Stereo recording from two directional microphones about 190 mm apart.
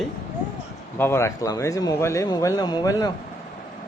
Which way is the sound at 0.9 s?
15° left (ahead or behind).